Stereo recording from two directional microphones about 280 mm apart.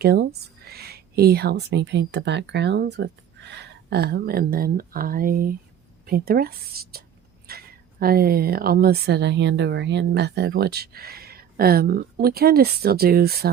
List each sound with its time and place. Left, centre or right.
0.0 s speech: right